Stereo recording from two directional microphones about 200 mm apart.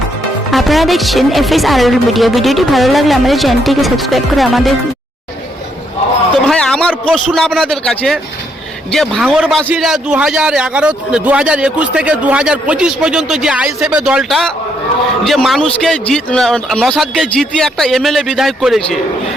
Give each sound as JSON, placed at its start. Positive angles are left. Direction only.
{"t": 0.5, "sound": "a man's voice", "side_deg": 0}
{"t": 6.5, "sound": "a man's voice", "side_deg": 5}